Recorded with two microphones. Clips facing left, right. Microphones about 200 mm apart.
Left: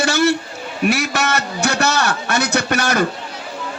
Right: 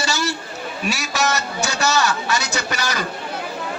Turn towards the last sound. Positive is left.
turn(degrees=55)  # may be behind; listen again after turning